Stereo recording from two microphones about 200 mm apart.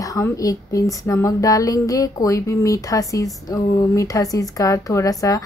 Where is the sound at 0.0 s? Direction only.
15° left (ahead or behind).